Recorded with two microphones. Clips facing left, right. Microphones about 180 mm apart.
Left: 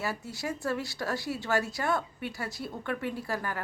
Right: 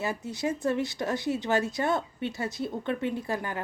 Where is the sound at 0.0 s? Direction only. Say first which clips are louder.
Right 4 dB; 20° right (ahead or behind).